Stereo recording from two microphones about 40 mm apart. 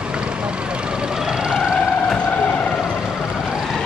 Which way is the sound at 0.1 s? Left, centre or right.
Right.